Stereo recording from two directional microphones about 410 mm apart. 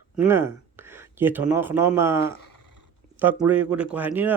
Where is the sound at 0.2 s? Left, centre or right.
Centre.